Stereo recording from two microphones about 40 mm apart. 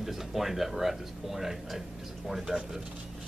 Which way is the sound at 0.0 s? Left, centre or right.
Centre.